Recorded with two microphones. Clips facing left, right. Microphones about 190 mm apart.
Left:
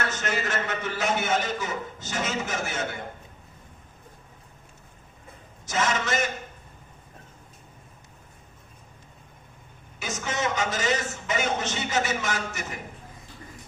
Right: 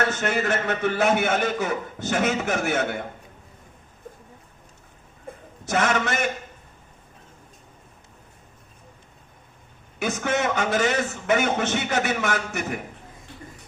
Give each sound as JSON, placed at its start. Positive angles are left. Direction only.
{"t": 0.2, "sound": "a man's voice", "side_deg": -60}
{"t": 5.6, "sound": "a man's voice", "side_deg": -60}
{"t": 10.0, "sound": "a man's voice", "side_deg": -60}